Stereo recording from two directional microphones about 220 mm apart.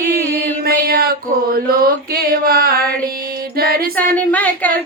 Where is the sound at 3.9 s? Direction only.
5° left (ahead or behind).